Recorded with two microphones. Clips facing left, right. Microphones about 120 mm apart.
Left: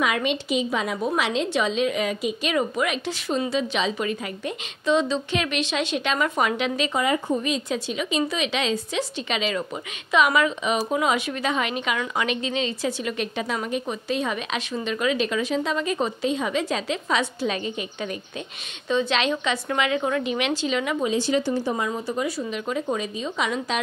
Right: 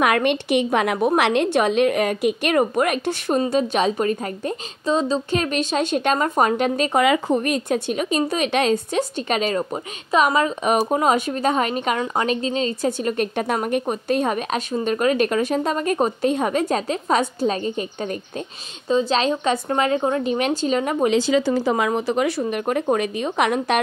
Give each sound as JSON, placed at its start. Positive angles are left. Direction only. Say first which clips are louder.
{"t": 0.0, "sound": "a woman's voice", "louder": "right 5 dB", "side_deg": -60}
{"t": 7.0, "sound": "speech", "louder": "right 6 dB", "side_deg": -80}
{"t": 7.4, "sound": "a woman's voice", "louder": "right 5 dB", "side_deg": -55}
{"t": 21.6, "sound": "speech", "louder": "right 6 dB", "side_deg": -85}
{"t": 22.4, "sound": "a woman's voice", "louder": "right 5 dB", "side_deg": -55}